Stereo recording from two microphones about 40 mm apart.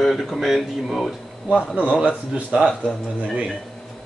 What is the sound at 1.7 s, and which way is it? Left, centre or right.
Speech, right.